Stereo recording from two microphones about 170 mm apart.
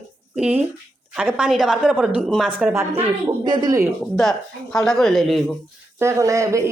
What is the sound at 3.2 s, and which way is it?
Speech, 25° right (ahead or behind).